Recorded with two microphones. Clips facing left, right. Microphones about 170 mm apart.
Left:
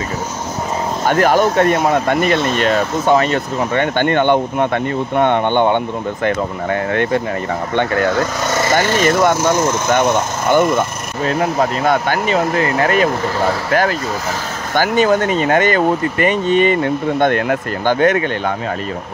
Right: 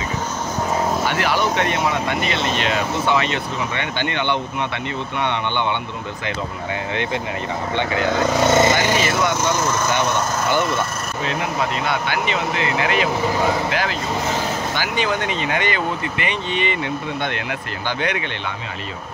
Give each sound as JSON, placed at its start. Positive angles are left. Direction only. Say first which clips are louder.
{"t": 1.0, "sound": "speech", "louder": "left 7 dB", "side_deg": 45}
{"t": 8.4, "sound": "speech", "louder": "right 3 dB", "side_deg": -25}
{"t": 9.0, "sound": "speech", "louder": "left 7 dB", "side_deg": 50}